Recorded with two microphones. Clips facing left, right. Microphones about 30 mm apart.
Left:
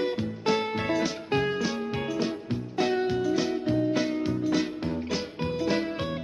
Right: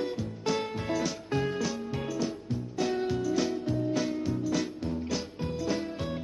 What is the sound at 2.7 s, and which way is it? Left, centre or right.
Music, left.